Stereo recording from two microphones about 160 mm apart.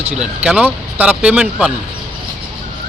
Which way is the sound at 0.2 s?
5° right (ahead or behind).